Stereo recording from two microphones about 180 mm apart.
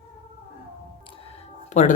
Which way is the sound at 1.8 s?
40° left (ahead or behind).